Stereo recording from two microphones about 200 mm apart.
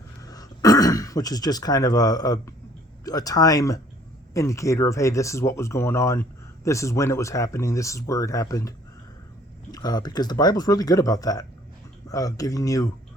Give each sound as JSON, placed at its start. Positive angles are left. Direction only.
{"t": 0.2, "sound": "speech", "side_deg": 20}
{"t": 9.7, "sound": "speech", "side_deg": 20}